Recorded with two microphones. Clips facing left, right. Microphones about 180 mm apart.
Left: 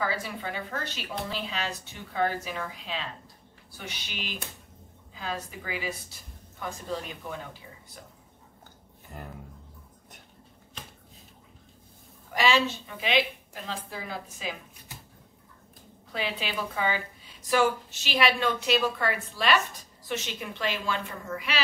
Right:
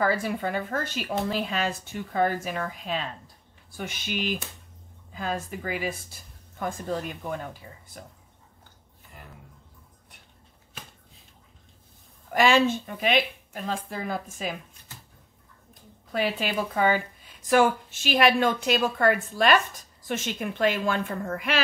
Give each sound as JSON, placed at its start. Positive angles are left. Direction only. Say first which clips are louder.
{"t": 0.0, "sound": "a woman's voice", "louder": "right 6 dB", "side_deg": -50}
{"t": 9.1, "sound": "speech", "louder": "left 7 dB", "side_deg": 45}
{"t": 12.3, "sound": "a woman's voice", "louder": "right 4 dB", "side_deg": -50}
{"t": 14.9, "sound": "a sound", "louder": "left 1 dB", "side_deg": 15}
{"t": 16.1, "sound": "a woman's voice", "louder": "right 6 dB", "side_deg": -50}